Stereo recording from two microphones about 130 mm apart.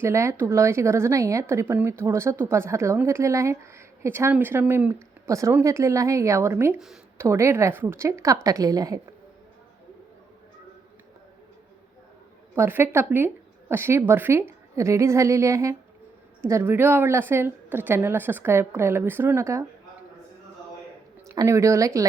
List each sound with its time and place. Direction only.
0.0 s speech: 20° right (ahead or behind)
6.7 s speech: centre (ahead or behind)
7.2 s speech: 20° right (ahead or behind)
12.5 s a woman's voice: 20° right (ahead or behind)
21.2 s speech: 20° right (ahead or behind)